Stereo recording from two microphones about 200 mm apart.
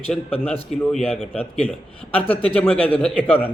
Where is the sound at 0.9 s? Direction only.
5° left (ahead or behind).